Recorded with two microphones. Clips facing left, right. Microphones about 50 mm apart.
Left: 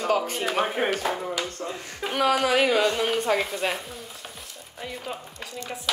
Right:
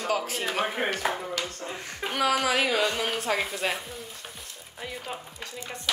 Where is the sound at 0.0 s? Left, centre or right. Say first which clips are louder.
Left 4 dB; centre.